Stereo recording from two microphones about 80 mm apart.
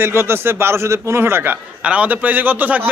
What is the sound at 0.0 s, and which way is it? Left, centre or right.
A man's voice, right.